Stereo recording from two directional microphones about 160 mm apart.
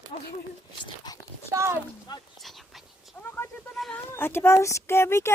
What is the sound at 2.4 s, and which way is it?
Cat, centre (ahead or behind).